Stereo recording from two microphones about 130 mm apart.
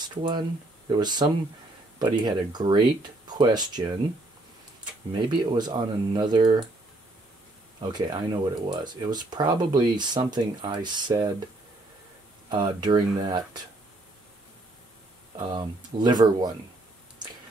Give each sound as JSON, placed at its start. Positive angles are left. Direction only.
{"t": 0.0, "sound": "speech", "side_deg": -35}
{"t": 5.3, "sound": "speech", "side_deg": -35}
{"t": 7.8, "sound": "speech", "side_deg": -35}
{"t": 12.4, "sound": "speech", "side_deg": -35}
{"t": 15.3, "sound": "speech", "side_deg": -35}